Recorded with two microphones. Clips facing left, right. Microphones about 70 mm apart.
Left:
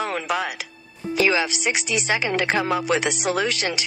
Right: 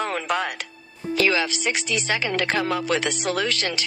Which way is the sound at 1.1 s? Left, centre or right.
Centre.